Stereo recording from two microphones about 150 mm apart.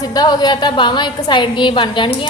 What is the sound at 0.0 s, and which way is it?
A woman's voice, 25° left (ahead or behind).